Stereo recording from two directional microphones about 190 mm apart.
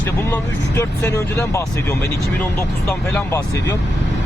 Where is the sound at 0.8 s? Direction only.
15° left (ahead or behind).